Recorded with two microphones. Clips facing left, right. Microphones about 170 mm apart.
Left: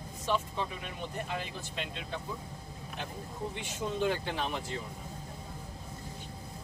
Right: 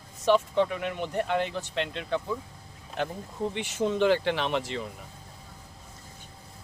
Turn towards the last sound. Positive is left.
turn(degrees=-80)